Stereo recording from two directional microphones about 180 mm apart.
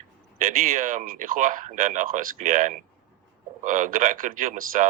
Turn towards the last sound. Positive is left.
turn(degrees=-45)  # may be behind; listen again after turning